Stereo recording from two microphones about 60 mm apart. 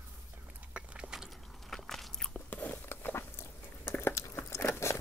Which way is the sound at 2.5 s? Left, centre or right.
Left.